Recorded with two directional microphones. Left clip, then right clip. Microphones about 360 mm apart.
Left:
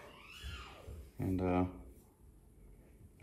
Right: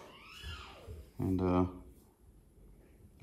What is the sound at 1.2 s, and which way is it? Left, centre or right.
Speech, centre.